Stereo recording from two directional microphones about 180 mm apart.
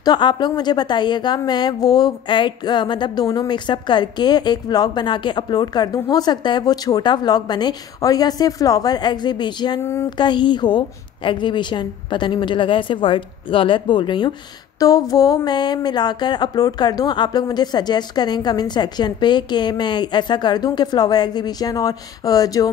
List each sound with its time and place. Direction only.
0.0 s speech: 25° left (ahead or behind)